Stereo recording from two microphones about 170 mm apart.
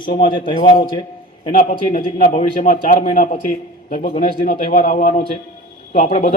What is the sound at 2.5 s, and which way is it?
A man's voice, 55° left (ahead or behind).